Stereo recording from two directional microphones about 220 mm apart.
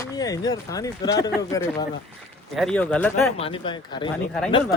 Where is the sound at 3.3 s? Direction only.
25° left (ahead or behind).